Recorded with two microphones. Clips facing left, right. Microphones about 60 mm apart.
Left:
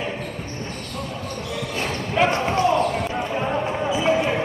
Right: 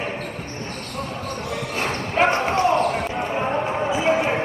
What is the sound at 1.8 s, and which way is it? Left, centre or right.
Clip-clop, right.